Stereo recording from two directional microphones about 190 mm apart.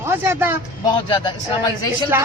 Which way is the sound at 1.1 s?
20° left (ahead or behind).